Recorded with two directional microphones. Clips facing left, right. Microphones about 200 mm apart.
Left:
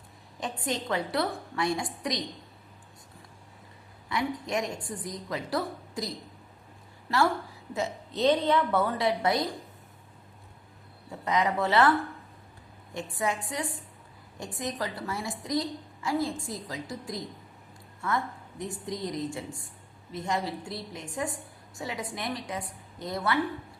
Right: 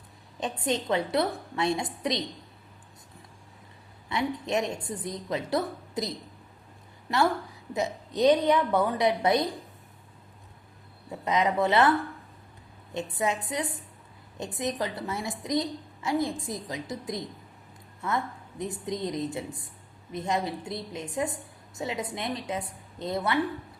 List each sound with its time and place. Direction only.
0.3 s a woman's voice: 20° right (ahead or behind)
4.1 s a woman's voice: 25° right (ahead or behind)
7.1 s a woman's voice: 15° right (ahead or behind)
11.3 s a woman's voice: 20° right (ahead or behind)